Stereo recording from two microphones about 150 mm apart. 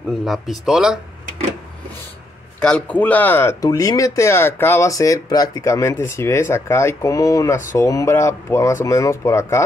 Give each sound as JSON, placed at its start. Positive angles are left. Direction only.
{"t": 0.2, "sound": "speech", "side_deg": 0}
{"t": 2.6, "sound": "speech", "side_deg": 5}